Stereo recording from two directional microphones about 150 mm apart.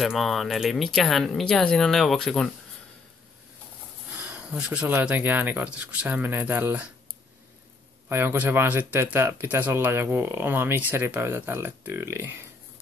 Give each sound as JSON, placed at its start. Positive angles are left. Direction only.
{"t": 0.0, "sound": "speech", "side_deg": 0}
{"t": 4.2, "sound": "speech", "side_deg": -10}
{"t": 8.1, "sound": "speech", "side_deg": -15}